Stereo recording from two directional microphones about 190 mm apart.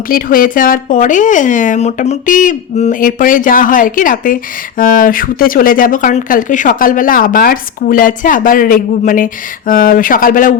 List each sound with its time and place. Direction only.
0.1 s speech: 45° left (ahead or behind)